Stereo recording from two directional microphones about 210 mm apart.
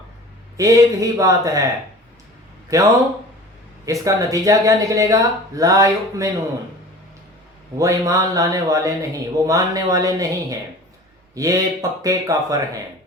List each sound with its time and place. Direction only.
0.5 s speech: 15° right (ahead or behind)
2.7 s speech: 15° right (ahead or behind)
4.0 s speech: 15° right (ahead or behind)
7.8 s speech: 15° right (ahead or behind)